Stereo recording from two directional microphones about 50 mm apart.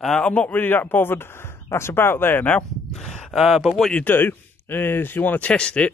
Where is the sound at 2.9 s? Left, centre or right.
Centre.